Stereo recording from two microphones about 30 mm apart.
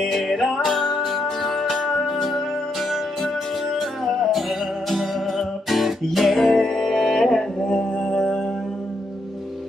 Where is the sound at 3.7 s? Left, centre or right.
Centre.